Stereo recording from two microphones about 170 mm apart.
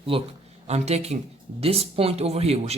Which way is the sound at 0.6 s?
40° right (ahead or behind).